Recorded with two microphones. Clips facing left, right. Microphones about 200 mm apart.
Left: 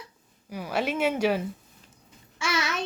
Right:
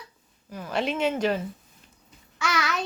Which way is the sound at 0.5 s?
10° left (ahead or behind).